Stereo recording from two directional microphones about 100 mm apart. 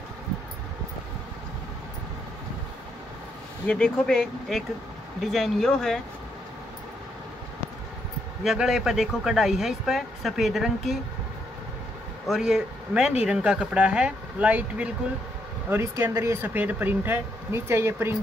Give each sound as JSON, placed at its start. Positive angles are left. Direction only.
{"t": 3.6, "sound": "speech", "side_deg": 10}
{"t": 8.5, "sound": "speech", "side_deg": -5}
{"t": 12.3, "sound": "speech", "side_deg": -5}
{"t": 15.7, "sound": "speech", "side_deg": -25}